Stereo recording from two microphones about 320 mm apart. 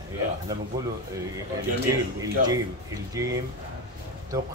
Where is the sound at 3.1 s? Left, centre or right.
Centre.